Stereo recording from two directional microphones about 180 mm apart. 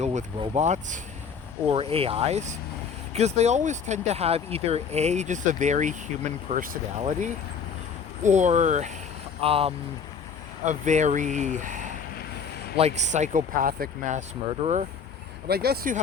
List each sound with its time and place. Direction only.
0.0 s speech: 40° right (ahead or behind)
8.2 s speech: 40° right (ahead or behind)
10.7 s speech: 40° right (ahead or behind)
15.4 s speech: 60° right (ahead or behind)